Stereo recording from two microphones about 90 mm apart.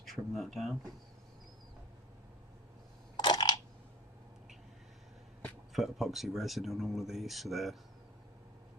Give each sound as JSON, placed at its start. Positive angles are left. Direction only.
{"t": 0.0, "sound": "speech", "side_deg": 0}
{"t": 3.2, "sound": "a sound", "side_deg": 55}
{"t": 5.7, "sound": "speech", "side_deg": 0}